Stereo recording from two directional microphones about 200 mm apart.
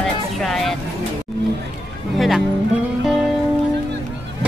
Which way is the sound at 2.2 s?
Centre (ahead or behind).